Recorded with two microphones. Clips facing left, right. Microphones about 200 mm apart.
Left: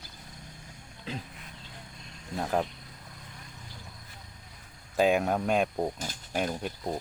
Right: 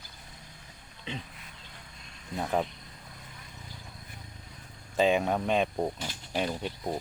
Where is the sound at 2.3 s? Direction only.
Centre (ahead or behind).